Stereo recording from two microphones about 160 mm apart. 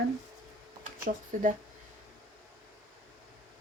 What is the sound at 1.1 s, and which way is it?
Speech, 60° right (ahead or behind).